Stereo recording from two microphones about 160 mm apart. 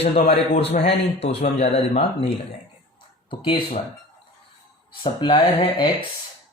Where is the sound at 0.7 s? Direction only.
40° left (ahead or behind).